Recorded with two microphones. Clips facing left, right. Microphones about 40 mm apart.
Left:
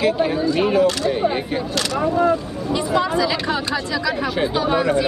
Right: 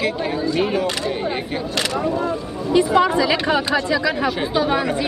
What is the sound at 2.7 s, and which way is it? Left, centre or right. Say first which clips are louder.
Speech: right 4 dB; right.